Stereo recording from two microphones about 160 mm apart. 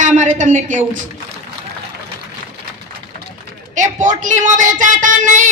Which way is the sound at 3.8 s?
50° right (ahead or behind).